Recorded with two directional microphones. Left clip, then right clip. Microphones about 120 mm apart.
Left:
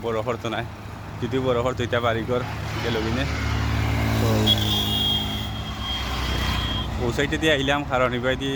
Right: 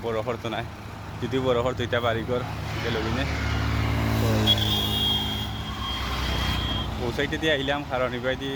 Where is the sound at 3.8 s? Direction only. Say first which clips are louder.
Left 4 dB; 80° left.